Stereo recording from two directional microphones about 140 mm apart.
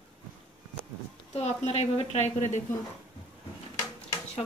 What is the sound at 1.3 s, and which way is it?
A woman's voice, 45° left (ahead or behind).